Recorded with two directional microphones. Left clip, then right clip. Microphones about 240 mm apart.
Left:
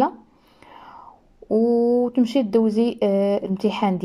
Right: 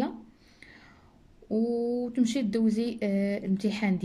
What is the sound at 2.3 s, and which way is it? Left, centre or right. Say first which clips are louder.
Speech: left 10 dB; left.